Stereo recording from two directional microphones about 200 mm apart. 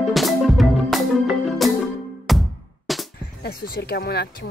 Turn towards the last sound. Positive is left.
turn(degrees=50)  # may be behind; listen again after turning